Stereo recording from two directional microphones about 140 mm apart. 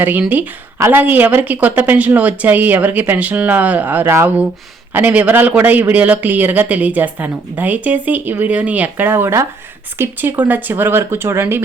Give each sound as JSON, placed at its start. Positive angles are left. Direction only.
{"t": 0.0, "sound": "a man's voice", "side_deg": -10}